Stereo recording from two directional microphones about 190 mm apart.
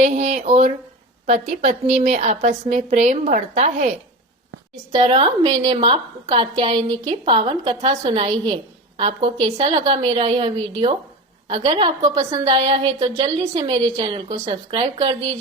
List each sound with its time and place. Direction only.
0.0 s a woman's voice: 40° right (ahead or behind)
4.9 s a woman's voice: 25° right (ahead or behind)